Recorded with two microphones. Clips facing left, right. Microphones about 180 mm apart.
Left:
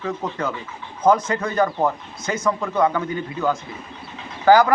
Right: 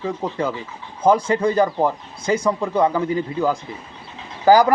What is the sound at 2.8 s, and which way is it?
Speech, 30° right (ahead or behind).